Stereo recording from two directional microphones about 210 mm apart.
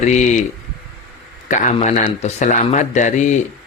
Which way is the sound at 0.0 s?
35° left (ahead or behind).